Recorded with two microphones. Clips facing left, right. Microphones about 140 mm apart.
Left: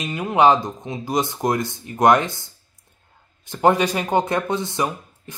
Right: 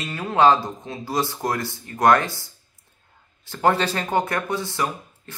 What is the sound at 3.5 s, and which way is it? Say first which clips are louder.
Speech: left 3 dB; 20° left (ahead or behind).